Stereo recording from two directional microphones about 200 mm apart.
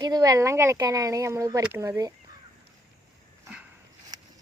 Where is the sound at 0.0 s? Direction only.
20° right (ahead or behind).